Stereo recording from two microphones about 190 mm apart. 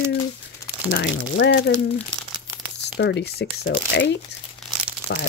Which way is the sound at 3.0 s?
60° left (ahead or behind).